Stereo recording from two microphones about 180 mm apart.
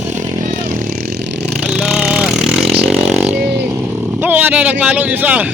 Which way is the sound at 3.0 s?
5° right (ahead or behind).